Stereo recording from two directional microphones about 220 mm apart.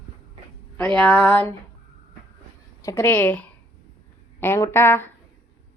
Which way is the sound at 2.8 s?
10° left (ahead or behind).